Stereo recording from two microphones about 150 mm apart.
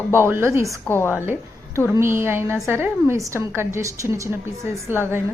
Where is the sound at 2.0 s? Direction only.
15° right (ahead or behind).